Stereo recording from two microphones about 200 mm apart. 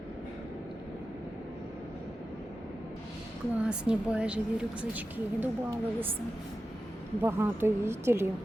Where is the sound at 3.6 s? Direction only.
5° right (ahead or behind).